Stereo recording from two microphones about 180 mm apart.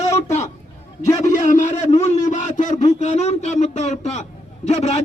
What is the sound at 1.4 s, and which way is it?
A man's voice, 45° left (ahead or behind).